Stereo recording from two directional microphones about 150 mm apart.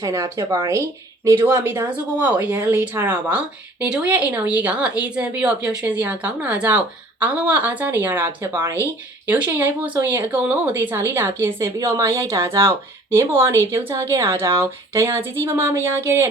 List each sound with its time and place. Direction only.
0.0 s a woman's voice: 20° right (ahead or behind)